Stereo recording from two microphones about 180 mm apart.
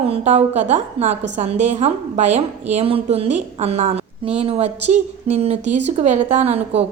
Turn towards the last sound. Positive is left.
turn(degrees=-35)  # may be behind; listen again after turning